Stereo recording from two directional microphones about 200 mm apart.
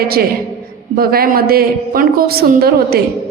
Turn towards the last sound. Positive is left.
turn(degrees=-50)  # may be behind; listen again after turning